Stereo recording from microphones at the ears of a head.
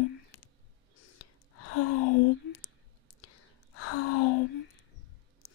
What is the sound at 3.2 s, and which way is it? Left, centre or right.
Whispering, left.